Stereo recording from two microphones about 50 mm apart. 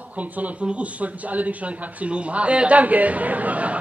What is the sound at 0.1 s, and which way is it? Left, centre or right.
A man's voice, right.